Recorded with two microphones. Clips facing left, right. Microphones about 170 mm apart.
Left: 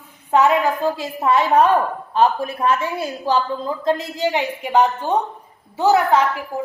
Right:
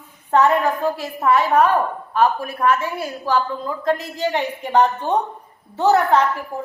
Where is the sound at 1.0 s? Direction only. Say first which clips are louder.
Right 2 dB; 25° left (ahead or behind).